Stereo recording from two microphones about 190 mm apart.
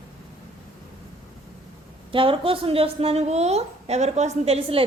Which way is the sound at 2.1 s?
30° right (ahead or behind).